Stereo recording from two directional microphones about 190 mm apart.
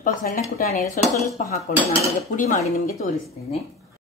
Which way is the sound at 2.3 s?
40° left (ahead or behind).